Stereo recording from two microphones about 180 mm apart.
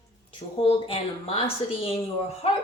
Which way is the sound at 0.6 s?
30° left (ahead or behind).